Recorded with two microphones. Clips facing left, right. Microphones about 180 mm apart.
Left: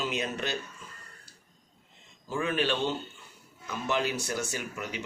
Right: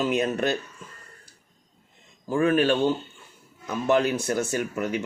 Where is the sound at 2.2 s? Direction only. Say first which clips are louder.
Right 8 dB; 50° right (ahead or behind).